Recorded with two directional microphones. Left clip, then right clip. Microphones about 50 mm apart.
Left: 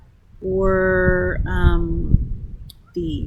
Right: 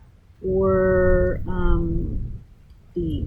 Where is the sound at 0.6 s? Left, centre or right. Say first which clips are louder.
Left 1 dB; left.